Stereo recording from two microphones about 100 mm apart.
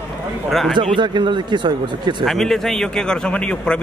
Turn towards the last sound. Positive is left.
turn(degrees=10)  # may be behind; listen again after turning